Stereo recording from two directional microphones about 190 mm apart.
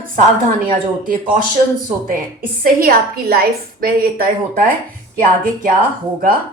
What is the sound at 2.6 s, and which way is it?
A woman's voice, 50° right (ahead or behind).